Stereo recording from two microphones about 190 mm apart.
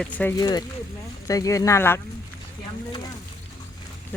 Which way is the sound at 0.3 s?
20° left (ahead or behind).